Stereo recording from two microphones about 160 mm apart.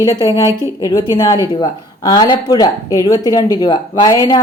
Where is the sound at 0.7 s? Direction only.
20° left (ahead or behind).